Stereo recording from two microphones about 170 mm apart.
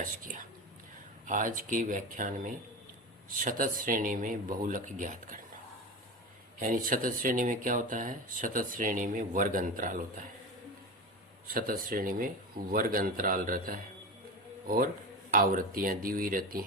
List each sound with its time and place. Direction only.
0.0 s speech: 50° right (ahead or behind)
6.6 s speech: 50° right (ahead or behind)
11.4 s speech: 60° right (ahead or behind)
15.3 s speech: 55° right (ahead or behind)